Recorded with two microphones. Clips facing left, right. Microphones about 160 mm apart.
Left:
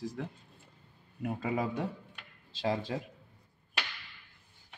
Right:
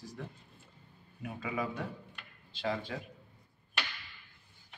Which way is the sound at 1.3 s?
40° left (ahead or behind).